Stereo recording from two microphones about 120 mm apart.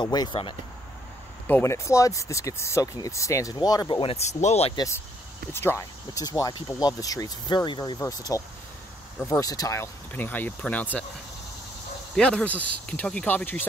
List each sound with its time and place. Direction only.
0.0 s speech: 35° left (ahead or behind)
1.5 s speech: 20° left (ahead or behind); by 4.2 s 45° left (ahead or behind)
4.3 s speech: 70° left (ahead or behind)
4.7 s speech: 25° left (ahead or behind)
8.0 s speech: 30° left (ahead or behind); by 11.1 s 15° left (ahead or behind)
12.2 s speech: 5° left (ahead or behind)